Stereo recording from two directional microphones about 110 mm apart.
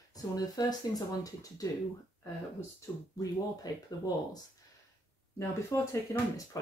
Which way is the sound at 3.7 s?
35° left (ahead or behind).